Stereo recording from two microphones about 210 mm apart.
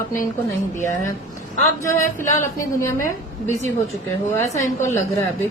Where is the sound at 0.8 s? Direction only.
15° left (ahead or behind).